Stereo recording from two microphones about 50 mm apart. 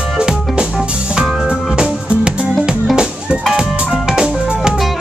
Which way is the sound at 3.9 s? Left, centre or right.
Centre.